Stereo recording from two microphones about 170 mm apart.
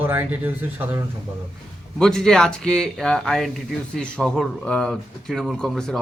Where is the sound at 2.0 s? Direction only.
5° left (ahead or behind).